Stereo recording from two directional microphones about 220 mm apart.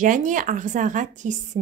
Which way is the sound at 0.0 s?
35° right (ahead or behind).